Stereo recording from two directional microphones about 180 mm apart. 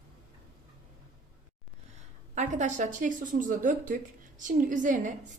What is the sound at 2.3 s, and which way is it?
A woman's voice, 40° right (ahead or behind).